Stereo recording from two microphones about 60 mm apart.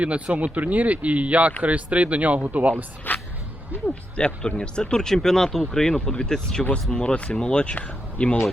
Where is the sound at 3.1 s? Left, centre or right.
Left.